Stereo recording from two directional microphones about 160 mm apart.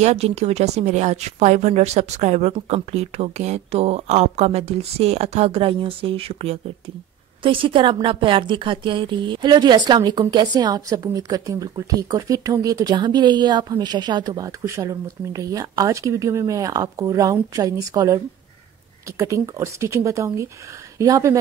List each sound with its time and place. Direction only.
0.0 s a woman's voice: 40° right (ahead or behind); by 21.4 s 20° right (ahead or behind)